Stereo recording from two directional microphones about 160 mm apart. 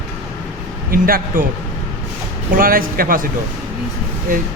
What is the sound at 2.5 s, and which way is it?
Speech, 65° right (ahead or behind).